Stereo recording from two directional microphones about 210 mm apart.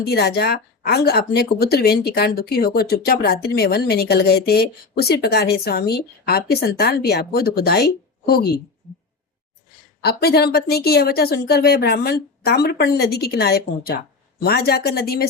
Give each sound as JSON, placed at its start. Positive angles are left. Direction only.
{"t": 0.0, "sound": "speech", "side_deg": 50}
{"t": 10.0, "sound": "speech", "side_deg": 50}